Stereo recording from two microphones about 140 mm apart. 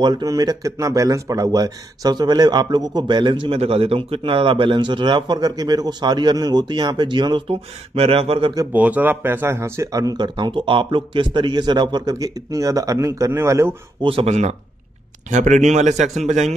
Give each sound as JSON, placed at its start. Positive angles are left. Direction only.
{"t": 0.0, "sound": "speech", "side_deg": -30}
{"t": 8.7, "sound": "speech", "side_deg": -10}
{"t": 14.0, "sound": "a man's voice", "side_deg": -45}